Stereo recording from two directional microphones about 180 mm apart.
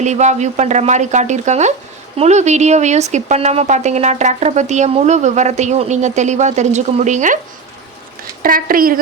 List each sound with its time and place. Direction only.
0.0 s speech: 40° right (ahead or behind)
8.4 s a woman's voice: 50° right (ahead or behind)